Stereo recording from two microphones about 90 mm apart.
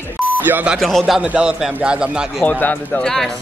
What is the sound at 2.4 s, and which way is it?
Speech, 20° left (ahead or behind).